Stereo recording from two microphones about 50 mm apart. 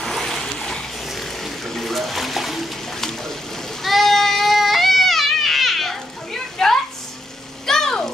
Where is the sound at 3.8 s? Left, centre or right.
Centre.